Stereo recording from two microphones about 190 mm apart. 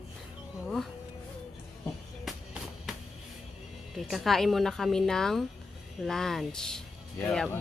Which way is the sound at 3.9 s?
Centre (ahead or behind).